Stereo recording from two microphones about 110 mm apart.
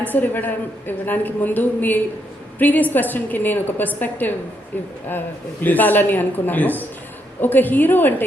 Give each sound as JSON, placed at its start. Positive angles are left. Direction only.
{"t": 0.0, "sound": "a woman's voice", "side_deg": 15}
{"t": 5.6, "sound": "a woman's voice", "side_deg": 15}